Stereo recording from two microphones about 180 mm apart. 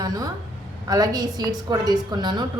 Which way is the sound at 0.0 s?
20° right (ahead or behind).